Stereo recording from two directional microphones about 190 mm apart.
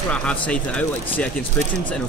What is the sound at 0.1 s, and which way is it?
Speech, 5° left (ahead or behind).